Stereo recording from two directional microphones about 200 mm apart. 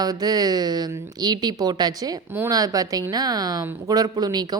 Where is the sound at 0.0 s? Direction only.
20° right (ahead or behind).